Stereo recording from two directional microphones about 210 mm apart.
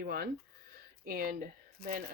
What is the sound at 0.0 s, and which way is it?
Speech, 45° right (ahead or behind).